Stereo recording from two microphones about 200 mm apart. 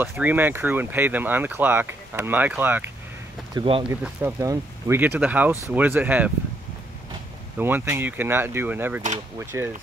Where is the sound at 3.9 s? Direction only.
10° right (ahead or behind).